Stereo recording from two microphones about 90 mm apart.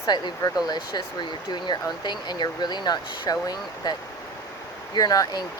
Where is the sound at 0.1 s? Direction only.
50° left (ahead or behind).